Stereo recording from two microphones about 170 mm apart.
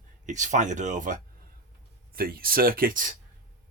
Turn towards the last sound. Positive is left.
turn(degrees=-55)  # may be behind; listen again after turning